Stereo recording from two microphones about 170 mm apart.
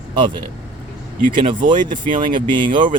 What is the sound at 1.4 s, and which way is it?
Speech, 30° right (ahead or behind).